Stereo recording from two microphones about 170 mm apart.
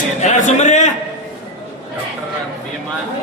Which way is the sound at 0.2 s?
45° left (ahead or behind).